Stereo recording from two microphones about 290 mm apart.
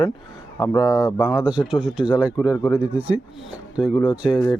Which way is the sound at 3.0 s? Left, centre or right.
Centre.